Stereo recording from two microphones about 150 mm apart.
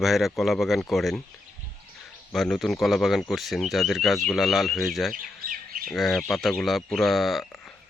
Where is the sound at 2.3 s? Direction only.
Centre (ahead or behind).